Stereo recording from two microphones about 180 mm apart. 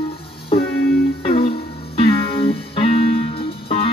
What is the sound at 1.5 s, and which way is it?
Music, 30° left (ahead or behind).